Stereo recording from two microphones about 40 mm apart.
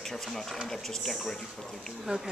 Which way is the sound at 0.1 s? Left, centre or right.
Centre.